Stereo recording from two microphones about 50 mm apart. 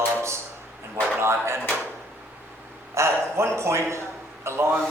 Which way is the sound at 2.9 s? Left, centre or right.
Right.